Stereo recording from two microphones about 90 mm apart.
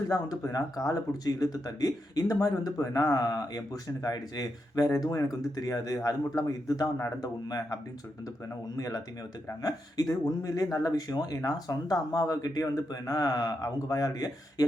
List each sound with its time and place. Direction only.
0.1 s speech: 40° left (ahead or behind)